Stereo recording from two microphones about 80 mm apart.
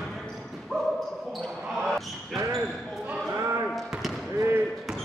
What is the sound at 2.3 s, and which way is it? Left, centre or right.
Basketball bounce, right.